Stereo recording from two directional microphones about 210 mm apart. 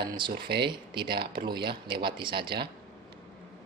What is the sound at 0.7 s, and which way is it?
Speech, 20° right (ahead or behind).